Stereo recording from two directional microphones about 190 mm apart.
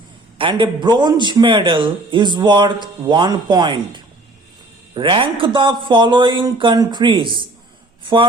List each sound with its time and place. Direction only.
0.3 s a man's voice: 25° right (ahead or behind)